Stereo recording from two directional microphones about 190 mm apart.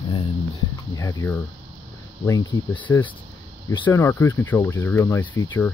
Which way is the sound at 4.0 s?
15° left (ahead or behind).